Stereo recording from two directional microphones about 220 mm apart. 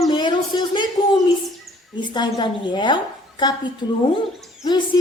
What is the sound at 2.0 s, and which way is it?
Speech, 20° left (ahead or behind).